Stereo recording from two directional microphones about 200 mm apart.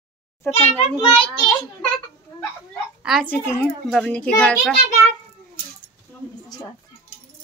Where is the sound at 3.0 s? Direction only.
Centre (ahead or behind).